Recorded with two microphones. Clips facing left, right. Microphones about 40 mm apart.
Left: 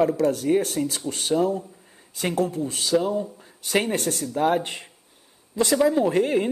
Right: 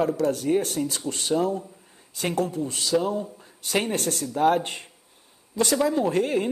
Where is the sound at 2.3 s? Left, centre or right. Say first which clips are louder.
Left 2 dB; left.